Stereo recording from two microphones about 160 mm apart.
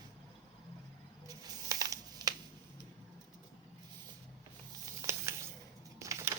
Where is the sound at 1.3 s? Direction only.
20° right (ahead or behind).